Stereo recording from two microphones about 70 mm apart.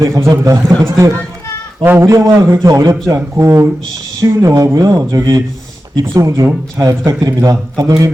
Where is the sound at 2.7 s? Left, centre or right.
Right.